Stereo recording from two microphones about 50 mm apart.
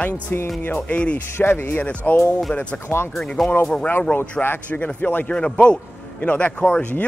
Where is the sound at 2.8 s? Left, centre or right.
Left.